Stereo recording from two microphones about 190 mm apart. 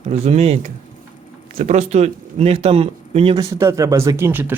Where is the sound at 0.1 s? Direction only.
35° right (ahead or behind).